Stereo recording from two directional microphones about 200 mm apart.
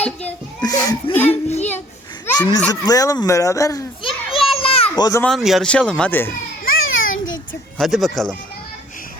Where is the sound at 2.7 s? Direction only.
20° left (ahead or behind).